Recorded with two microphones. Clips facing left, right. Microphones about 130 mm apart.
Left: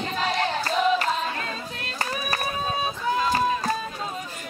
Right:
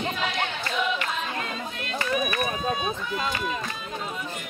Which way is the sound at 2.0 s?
40° left (ahead or behind).